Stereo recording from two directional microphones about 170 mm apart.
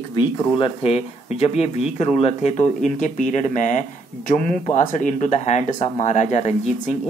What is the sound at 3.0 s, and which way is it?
Speech, 45° left (ahead or behind).